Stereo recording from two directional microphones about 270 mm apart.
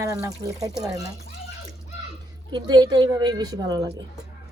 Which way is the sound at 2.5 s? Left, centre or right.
Centre.